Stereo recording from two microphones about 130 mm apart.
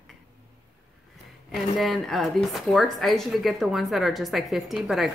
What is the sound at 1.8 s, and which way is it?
Speech, centre (ahead or behind).